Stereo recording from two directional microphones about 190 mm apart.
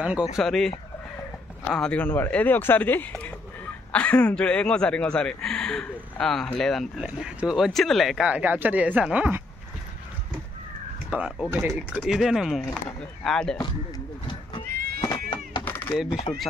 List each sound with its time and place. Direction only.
0.0 s speech: 5° right (ahead or behind)
11.1 s speech: 5° right (ahead or behind)
12.0 s speech: centre (ahead or behind)
13.6 s speech: 20° left (ahead or behind)
15.0 s a sound: 20° left (ahead or behind)
15.6 s a sound: 10° left (ahead or behind)